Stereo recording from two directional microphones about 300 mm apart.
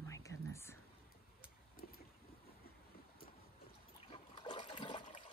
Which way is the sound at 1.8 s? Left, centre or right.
Left.